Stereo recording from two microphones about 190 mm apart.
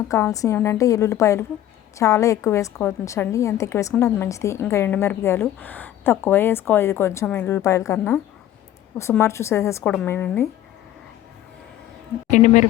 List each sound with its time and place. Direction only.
0.1 s a woman's voice: 15° left (ahead or behind)
12.3 s speech: 40° left (ahead or behind)